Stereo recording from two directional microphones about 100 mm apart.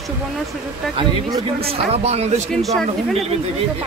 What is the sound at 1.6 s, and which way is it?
Speech, 90° right.